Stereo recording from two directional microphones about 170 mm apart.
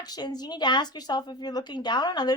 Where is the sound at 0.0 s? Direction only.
25° left (ahead or behind).